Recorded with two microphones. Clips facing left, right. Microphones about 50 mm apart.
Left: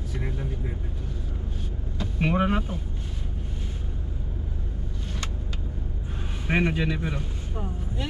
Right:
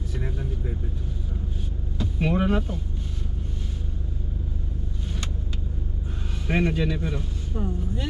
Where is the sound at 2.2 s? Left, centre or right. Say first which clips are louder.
Even; centre.